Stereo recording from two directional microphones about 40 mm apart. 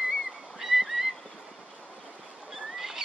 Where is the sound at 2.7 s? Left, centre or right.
Centre.